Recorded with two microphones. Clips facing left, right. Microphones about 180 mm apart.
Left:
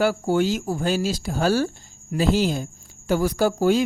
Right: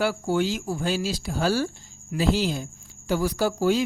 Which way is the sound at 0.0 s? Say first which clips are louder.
Left 3 dB; 45° left (ahead or behind).